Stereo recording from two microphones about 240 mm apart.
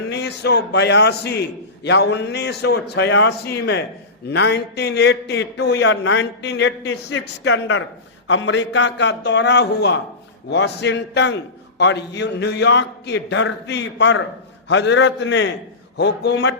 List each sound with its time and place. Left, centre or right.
0.1 s a man's voice: left